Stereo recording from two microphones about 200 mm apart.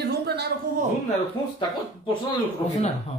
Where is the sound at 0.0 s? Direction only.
50° right (ahead or behind).